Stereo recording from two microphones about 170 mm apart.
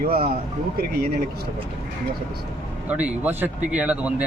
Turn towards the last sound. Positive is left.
turn(degrees=-10)  # may be behind; listen again after turning